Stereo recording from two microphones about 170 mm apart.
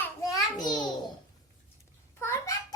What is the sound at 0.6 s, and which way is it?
Speech, 25° left (ahead or behind).